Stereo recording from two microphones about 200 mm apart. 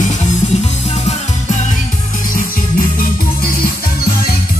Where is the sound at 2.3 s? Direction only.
45° left (ahead or behind).